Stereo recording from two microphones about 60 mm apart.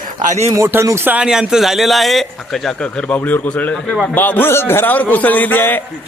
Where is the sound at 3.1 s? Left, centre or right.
Left.